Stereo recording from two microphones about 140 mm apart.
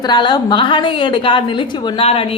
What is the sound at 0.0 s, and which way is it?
A woman's voice, 30° left (ahead or behind).